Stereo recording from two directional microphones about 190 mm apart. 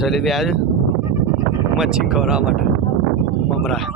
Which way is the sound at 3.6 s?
Centre (ahead or behind).